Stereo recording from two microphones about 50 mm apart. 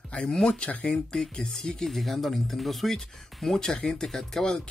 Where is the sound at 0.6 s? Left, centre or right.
Left.